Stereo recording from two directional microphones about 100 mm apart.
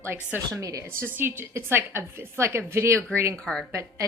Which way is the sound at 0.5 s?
35° right (ahead or behind).